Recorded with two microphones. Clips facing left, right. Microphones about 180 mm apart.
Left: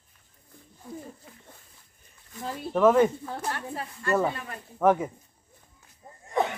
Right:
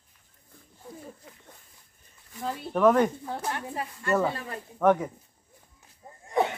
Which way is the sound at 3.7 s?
20° right (ahead or behind).